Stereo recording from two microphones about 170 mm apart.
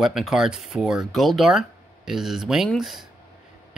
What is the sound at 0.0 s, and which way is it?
Speech, centre (ahead or behind).